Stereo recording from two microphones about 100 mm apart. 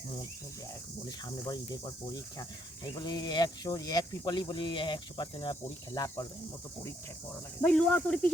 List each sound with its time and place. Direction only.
1.0 s cricket: 40° left (ahead or behind)
5.6 s speech: 35° left (ahead or behind)
7.6 s speech: 10° left (ahead or behind)